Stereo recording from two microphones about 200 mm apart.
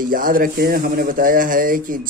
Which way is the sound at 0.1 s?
45° right (ahead or behind).